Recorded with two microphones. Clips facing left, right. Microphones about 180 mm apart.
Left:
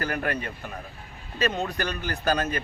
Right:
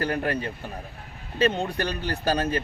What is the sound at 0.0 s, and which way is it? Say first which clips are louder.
A man's voice: right 2 dB; 30° right (ahead or behind).